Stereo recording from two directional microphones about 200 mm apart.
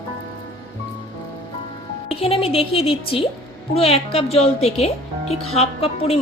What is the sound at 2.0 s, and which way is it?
A woman's voice, 30° left (ahead or behind).